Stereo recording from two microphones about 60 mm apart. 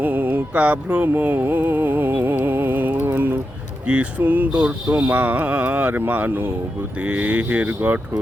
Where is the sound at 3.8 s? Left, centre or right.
Centre.